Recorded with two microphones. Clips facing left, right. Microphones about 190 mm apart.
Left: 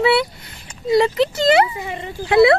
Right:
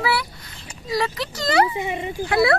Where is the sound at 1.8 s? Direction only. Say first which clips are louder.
Right 2 dB; 15° right (ahead or behind).